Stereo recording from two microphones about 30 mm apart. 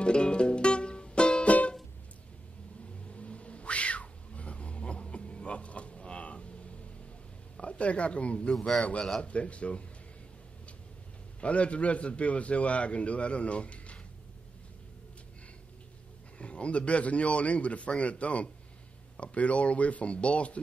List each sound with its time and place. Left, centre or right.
0.0 s music: left
1.4 s music: left
3.1 s cat: left
7.6 s a man's voice: left
11.4 s a man's voice: left
16.3 s a man's voice: left